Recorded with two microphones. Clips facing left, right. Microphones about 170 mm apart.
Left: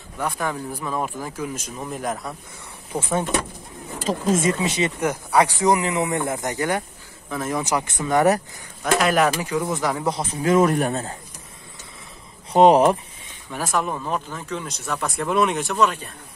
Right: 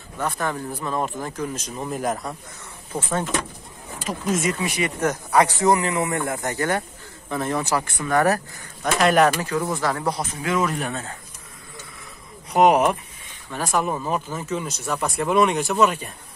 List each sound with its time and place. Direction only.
0.2 s speech: 10° left (ahead or behind)
2.9 s speech: 10° left (ahead or behind)
4.0 s speech: 25° left (ahead or behind)
5.0 s speech: 10° left (ahead or behind)
7.2 s speech: 5° left (ahead or behind)
7.6 s speech: 20° left (ahead or behind)
9.0 s speech: centre (ahead or behind)
9.4 s speech: 15° left (ahead or behind)
10.4 s speech: 45° left (ahead or behind)
12.5 s speech: 30° left (ahead or behind)
13.7 s speech: 5° right (ahead or behind)